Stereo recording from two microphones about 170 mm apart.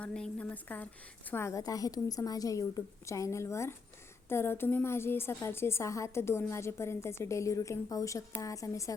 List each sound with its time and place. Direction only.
0.0 s a woman's voice: 5° left (ahead or behind)